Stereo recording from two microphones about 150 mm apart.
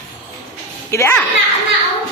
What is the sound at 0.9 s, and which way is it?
Speech, 15° left (ahead or behind).